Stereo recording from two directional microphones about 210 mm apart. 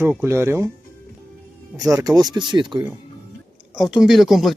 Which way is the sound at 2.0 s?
20° right (ahead or behind).